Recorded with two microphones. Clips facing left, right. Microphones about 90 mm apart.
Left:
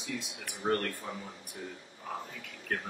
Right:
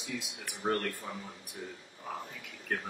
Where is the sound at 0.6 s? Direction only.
15° right (ahead or behind).